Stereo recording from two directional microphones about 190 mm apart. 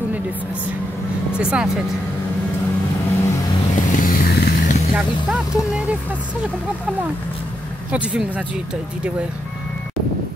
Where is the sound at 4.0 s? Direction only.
50° left (ahead or behind).